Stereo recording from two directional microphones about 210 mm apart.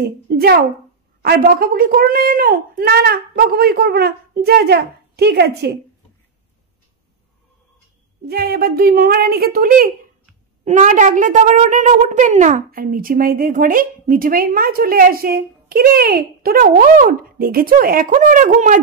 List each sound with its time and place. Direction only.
0.0 s a woman's voice: 50° right (ahead or behind)
8.3 s a woman's voice: 45° right (ahead or behind)